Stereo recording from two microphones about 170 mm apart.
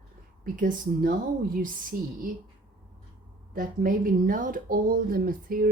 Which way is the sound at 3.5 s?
55° right (ahead or behind).